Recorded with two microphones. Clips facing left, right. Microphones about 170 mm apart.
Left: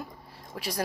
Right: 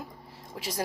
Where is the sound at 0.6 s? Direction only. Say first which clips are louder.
Left 1 dB; 20° right (ahead or behind).